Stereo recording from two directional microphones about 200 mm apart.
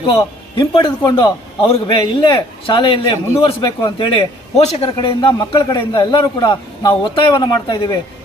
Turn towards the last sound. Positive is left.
turn(degrees=25)  # may be behind; listen again after turning